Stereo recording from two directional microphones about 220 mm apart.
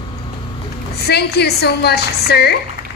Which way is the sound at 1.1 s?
50° left (ahead or behind).